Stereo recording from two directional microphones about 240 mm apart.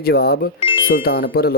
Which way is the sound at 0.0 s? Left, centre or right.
Left.